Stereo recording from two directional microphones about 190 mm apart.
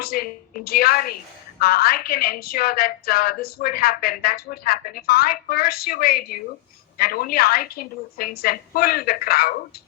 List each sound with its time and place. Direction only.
0.0 s a woman's voice: 50° left (ahead or behind)